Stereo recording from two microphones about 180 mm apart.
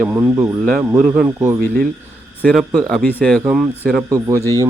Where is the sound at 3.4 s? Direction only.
5° right (ahead or behind).